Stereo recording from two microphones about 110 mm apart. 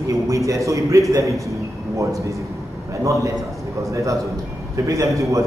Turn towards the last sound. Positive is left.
turn(degrees=-30)  # may be behind; listen again after turning